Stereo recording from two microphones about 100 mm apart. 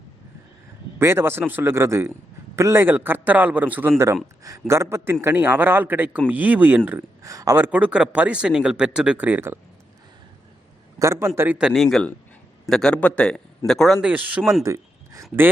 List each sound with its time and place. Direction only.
0.9 s speech: 25° right (ahead or behind)
7.2 s speech: 35° right (ahead or behind)
7.6 s speech: 15° right (ahead or behind)
11.0 s speech: 30° right (ahead or behind)
11.5 s a man's voice: 5° right (ahead or behind)
14.0 s speech: 15° right (ahead or behind)
14.6 s speech: 30° right (ahead or behind)